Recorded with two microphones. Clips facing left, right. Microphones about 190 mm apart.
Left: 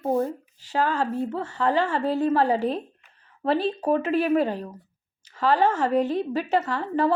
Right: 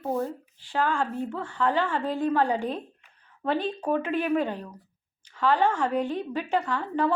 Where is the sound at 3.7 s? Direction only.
5° left (ahead or behind).